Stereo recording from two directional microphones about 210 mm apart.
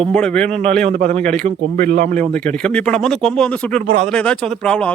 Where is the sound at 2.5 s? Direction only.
5° left (ahead or behind).